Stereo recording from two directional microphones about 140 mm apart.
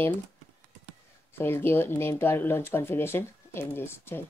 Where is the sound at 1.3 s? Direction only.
15° left (ahead or behind).